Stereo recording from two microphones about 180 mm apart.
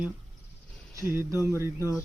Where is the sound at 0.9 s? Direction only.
15° right (ahead or behind).